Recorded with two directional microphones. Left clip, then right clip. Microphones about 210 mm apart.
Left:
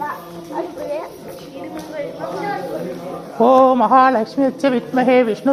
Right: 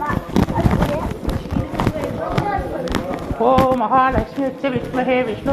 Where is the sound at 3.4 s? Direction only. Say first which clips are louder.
Left 4 dB; 70° left (ahead or behind).